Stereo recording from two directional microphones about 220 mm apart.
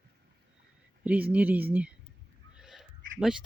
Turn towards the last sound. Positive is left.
turn(degrees=0)  # may be behind; listen again after turning